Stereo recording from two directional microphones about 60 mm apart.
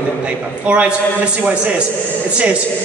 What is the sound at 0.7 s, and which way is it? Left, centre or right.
A woman's voice, centre.